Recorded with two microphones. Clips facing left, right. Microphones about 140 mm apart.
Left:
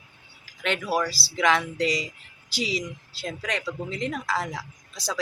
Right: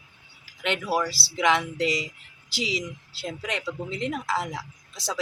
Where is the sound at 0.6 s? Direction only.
20° right (ahead or behind).